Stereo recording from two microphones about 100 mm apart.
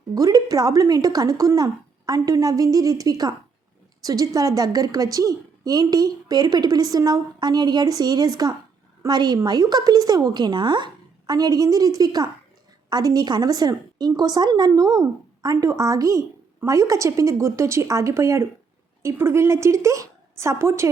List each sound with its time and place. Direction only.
0.1 s a woman's voice: 40° right (ahead or behind)